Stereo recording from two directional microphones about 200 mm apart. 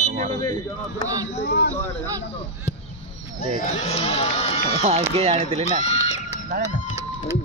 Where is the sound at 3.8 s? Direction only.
30° left (ahead or behind).